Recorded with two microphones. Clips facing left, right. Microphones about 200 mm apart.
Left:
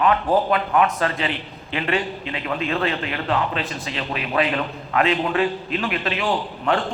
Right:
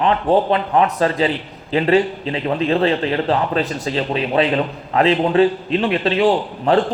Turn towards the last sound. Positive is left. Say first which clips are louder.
# right 6 dB
turn(degrees=-35)  # may be behind; listen again after turning